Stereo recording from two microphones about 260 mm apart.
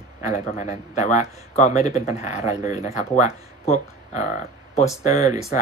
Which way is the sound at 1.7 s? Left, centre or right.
Centre.